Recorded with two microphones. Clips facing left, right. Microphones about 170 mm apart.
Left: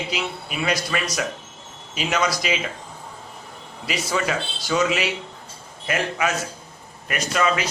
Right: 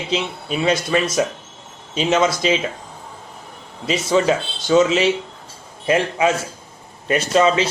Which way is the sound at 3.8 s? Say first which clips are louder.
Right 8 dB; 25° right (ahead or behind).